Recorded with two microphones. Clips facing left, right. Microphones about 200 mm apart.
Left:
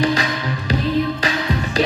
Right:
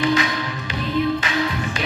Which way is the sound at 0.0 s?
40° left (ahead or behind).